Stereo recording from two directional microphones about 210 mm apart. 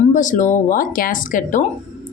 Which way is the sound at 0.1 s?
35° left (ahead or behind).